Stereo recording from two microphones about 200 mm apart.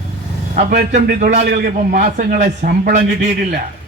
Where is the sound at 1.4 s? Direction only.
45° right (ahead or behind).